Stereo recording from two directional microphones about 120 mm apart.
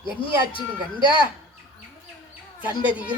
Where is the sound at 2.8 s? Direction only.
45° left (ahead or behind).